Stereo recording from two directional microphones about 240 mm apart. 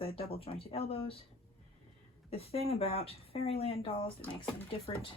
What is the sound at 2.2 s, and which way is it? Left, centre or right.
Speech, left.